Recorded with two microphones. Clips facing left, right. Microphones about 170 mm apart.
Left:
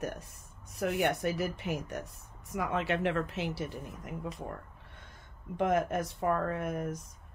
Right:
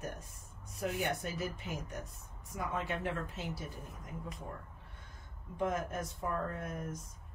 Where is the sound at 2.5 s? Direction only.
85° left.